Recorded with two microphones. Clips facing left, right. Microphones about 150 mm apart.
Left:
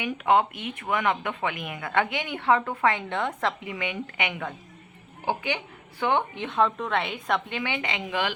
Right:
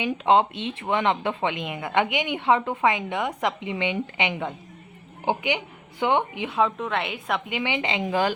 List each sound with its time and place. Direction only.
0.0 s a woman's voice: 25° right (ahead or behind); by 7.4 s 5° right (ahead or behind)
7.5 s speech: 20° right (ahead or behind)